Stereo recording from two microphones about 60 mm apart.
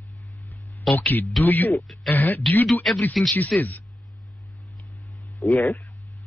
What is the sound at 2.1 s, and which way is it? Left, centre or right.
Speech, left.